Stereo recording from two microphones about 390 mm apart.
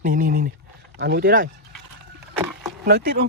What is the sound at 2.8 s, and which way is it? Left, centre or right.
Speech, right.